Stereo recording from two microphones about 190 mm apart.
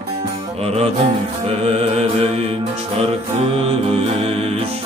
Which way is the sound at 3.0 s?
30° right (ahead or behind).